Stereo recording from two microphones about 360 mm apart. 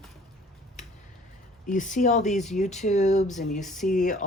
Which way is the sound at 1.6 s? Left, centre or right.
Left.